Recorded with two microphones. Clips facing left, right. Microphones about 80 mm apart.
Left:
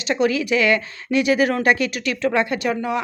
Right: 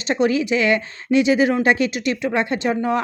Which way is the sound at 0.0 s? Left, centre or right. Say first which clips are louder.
Right 1 dB; right.